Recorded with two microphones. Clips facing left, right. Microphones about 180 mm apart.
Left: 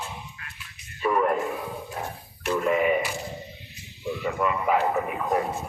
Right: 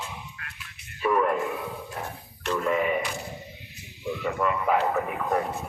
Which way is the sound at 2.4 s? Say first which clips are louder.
Left 3 dB; 10° left (ahead or behind).